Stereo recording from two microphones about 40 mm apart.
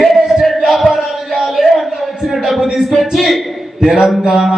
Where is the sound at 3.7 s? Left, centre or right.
Centre.